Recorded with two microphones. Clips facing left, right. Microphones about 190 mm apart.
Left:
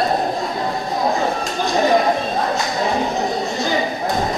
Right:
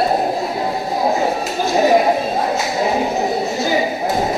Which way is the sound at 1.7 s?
10° right (ahead or behind).